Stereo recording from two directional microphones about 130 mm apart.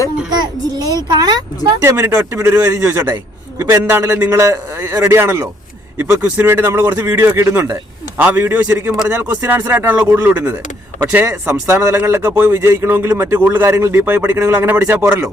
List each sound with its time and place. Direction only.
0.3 s a child's voice: 30° right (ahead or behind)